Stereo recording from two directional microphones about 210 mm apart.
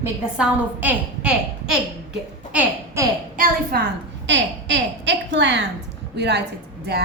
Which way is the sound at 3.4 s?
50° right (ahead or behind).